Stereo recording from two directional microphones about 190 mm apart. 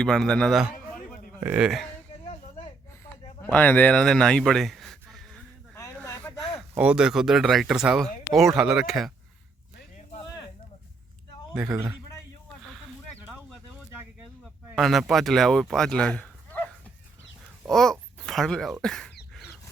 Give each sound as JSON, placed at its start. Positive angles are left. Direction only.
{"t": 0.0, "sound": "speech", "side_deg": 5}
{"t": 2.2, "sound": "snake", "side_deg": 30}
{"t": 3.4, "sound": "speech", "side_deg": 10}
{"t": 5.7, "sound": "a sound", "side_deg": 15}
{"t": 6.7, "sound": "speech", "side_deg": -5}
{"t": 11.7, "sound": "a man's voice", "side_deg": -15}
{"t": 14.8, "sound": "speech", "side_deg": 0}
{"t": 17.7, "sound": "a sound", "side_deg": 0}
{"t": 18.2, "sound": "speech", "side_deg": 0}